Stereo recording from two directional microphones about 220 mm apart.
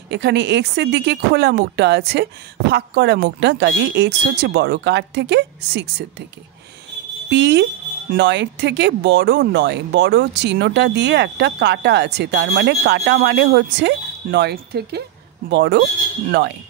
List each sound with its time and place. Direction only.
0.1 s speech: 50° right (ahead or behind)
7.2 s speech: 50° right (ahead or behind)